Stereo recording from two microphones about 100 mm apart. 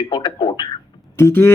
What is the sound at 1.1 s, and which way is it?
Speech, 25° left (ahead or behind).